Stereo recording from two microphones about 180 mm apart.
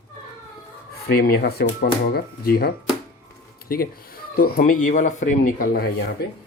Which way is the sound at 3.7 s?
55° left (ahead or behind).